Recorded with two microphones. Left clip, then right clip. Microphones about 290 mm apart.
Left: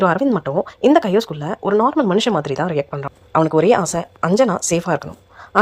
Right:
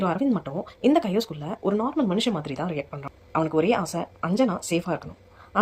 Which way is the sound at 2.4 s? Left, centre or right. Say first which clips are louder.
Left 10 dB; centre.